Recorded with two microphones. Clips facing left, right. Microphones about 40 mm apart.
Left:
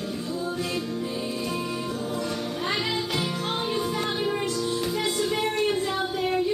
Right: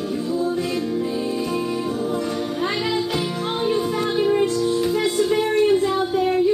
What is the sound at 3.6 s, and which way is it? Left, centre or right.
Music, centre.